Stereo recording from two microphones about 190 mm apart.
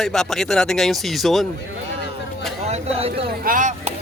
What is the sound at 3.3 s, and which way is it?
Speech, 45° right (ahead or behind).